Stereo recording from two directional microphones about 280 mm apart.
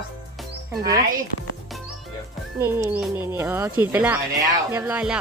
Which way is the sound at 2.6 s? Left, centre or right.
Centre.